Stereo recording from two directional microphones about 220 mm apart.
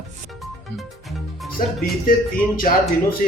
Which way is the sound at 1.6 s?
35° left (ahead or behind).